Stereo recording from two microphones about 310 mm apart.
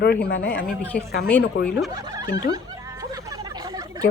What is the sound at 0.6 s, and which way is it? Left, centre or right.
Speech, centre.